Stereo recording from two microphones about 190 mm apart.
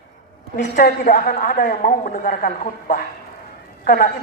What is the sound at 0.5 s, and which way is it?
A woman's voice, 55° left (ahead or behind).